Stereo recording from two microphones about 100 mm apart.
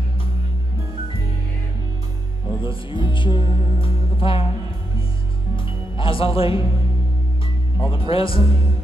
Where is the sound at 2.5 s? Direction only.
55° left (ahead or behind).